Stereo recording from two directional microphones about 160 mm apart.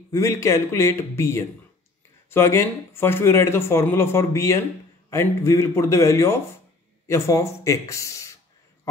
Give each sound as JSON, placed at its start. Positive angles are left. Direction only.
{"t": 0.1, "sound": "speech", "side_deg": 15}